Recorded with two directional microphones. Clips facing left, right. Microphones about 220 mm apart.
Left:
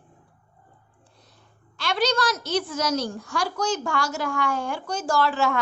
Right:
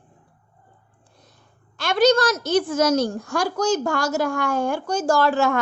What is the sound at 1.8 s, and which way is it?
A woman's voice, 50° right (ahead or behind).